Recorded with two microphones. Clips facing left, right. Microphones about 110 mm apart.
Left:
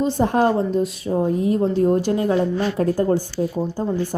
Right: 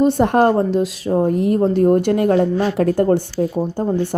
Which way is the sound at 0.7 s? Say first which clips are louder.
Right 3 dB; 90° right.